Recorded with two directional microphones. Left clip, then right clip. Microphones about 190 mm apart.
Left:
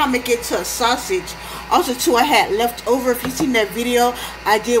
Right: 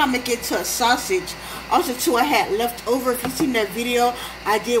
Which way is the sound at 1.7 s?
15° left (ahead or behind).